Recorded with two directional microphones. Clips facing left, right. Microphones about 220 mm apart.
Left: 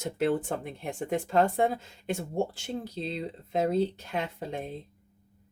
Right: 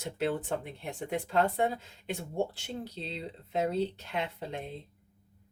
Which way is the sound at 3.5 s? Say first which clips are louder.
Left 4 dB; 45° left (ahead or behind).